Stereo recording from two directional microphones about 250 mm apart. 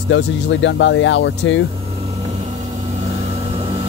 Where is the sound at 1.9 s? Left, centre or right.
Right.